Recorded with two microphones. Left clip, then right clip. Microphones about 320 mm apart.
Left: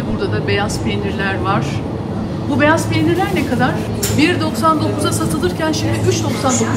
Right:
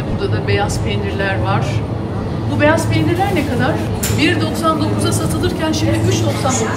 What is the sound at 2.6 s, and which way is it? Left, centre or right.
Speech, centre.